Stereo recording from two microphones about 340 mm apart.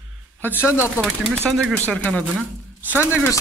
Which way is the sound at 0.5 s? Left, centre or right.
Centre.